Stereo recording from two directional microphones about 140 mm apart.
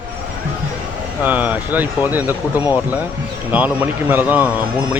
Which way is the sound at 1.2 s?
10° right (ahead or behind).